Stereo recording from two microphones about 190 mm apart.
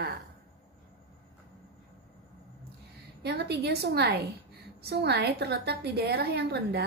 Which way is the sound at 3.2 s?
60° right (ahead or behind).